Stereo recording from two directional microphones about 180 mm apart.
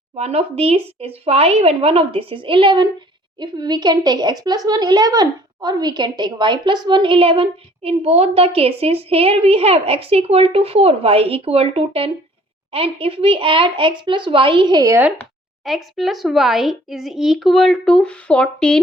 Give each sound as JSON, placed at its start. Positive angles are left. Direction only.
{"t": 0.2, "sound": "speech", "side_deg": -35}
{"t": 15.6, "sound": "speech", "side_deg": 0}